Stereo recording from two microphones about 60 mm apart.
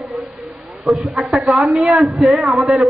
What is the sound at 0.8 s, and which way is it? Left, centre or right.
A man's voice, centre.